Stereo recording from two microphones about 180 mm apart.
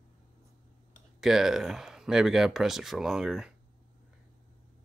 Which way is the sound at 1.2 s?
Centre (ahead or behind).